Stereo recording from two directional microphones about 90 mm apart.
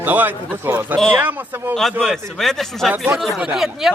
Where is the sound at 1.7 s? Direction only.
5° left (ahead or behind).